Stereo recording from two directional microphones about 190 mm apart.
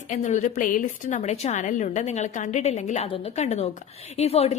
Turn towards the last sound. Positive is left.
turn(degrees=35)  # may be behind; listen again after turning